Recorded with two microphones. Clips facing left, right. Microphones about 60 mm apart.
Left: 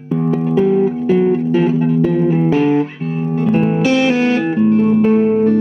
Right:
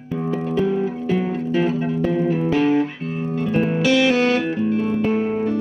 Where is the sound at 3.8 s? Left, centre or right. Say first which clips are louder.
Left 3 dB; left.